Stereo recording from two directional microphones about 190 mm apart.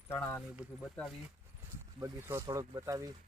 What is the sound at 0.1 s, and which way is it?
Speech, 10° left (ahead or behind).